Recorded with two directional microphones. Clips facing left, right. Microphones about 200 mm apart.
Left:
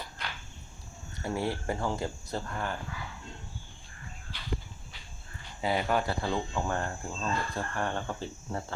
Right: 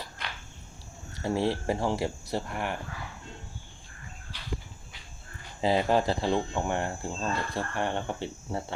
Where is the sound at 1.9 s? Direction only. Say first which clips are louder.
Right 4 dB; 80° right.